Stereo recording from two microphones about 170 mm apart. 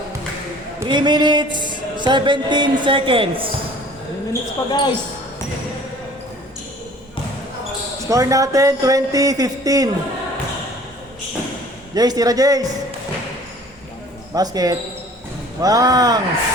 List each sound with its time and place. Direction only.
0.9 s music: 25° right (ahead or behind)
4.3 s speech: 25° left (ahead or behind)
8.0 s music: 20° right (ahead or behind)
11.9 s music: 20° right (ahead or behind)
14.3 s music: 20° right (ahead or behind)